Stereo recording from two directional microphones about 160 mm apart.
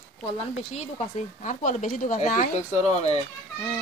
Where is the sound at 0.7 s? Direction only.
45° left (ahead or behind).